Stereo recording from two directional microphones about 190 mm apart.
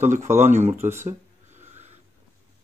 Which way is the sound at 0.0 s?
40° right (ahead or behind).